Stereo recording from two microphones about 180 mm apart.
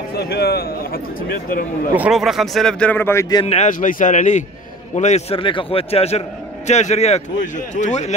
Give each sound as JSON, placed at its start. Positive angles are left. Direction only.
{"t": 0.1, "sound": "speech", "side_deg": 60}
{"t": 2.0, "sound": "a man's voice", "side_deg": -5}
{"t": 3.4, "sound": "speech", "side_deg": 40}